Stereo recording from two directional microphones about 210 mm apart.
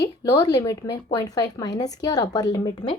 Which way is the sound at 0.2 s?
15° left (ahead or behind).